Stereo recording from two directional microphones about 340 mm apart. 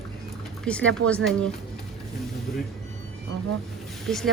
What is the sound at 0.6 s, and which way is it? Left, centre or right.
Speech, centre.